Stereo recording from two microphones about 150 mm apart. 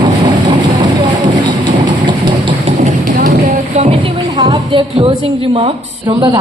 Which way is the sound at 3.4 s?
45° right (ahead or behind).